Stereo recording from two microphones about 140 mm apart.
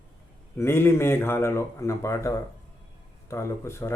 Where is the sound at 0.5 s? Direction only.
15° left (ahead or behind).